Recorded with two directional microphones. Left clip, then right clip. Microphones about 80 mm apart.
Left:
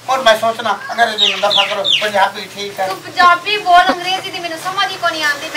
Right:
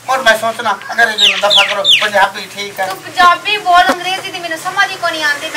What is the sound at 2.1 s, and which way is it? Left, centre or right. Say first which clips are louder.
Speech: right 2 dB; centre.